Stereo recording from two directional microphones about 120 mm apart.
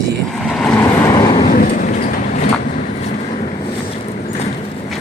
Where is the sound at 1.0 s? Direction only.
25° left (ahead or behind).